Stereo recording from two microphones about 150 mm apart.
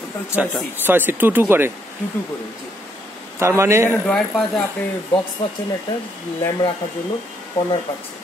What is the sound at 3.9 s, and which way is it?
Speech, 5° left (ahead or behind).